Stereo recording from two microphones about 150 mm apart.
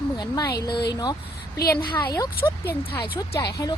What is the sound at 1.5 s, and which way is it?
Speech, 90° left.